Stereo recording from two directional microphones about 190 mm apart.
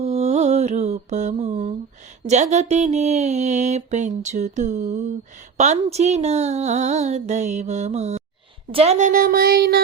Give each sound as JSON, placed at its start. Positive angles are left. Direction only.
{"t": 0.0, "sound": "mantra", "side_deg": -35}
{"t": 2.2, "sound": "speech", "side_deg": -35}